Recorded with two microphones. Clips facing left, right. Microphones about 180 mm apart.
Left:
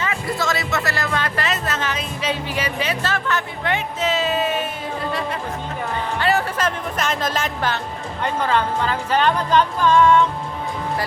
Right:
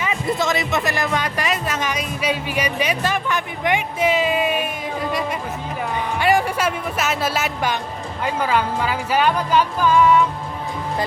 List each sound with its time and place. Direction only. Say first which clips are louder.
0.0 s speech: right 2 dB; 20° right (ahead or behind)
6.1 s speech: right 3 dB; 15° right (ahead or behind)